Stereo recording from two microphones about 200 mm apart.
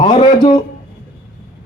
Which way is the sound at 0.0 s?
20° left (ahead or behind).